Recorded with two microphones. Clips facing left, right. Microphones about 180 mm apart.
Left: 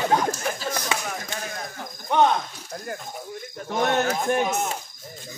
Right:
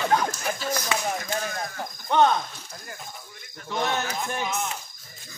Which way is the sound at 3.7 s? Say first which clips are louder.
Left 5 dB; 55° left (ahead or behind).